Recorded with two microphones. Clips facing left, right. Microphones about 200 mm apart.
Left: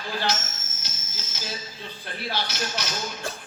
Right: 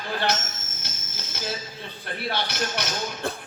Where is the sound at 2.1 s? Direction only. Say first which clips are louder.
Right 2 dB; 60° right (ahead or behind).